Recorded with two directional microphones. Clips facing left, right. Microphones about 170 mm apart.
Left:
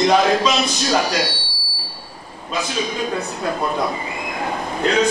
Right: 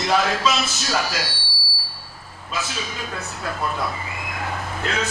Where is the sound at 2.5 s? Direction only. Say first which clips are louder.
Left 6 dB; 15° left (ahead or behind).